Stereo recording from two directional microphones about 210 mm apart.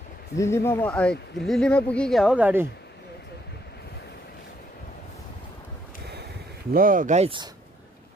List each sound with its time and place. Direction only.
0.4 s speech: 15° left (ahead or behind); by 2.7 s 10° right (ahead or behind)
6.7 s speech: 40° right (ahead or behind)